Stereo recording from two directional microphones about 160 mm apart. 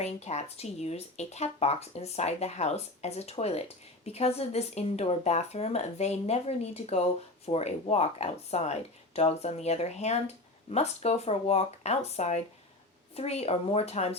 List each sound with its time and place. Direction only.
0.0 s speech: 45° left (ahead or behind)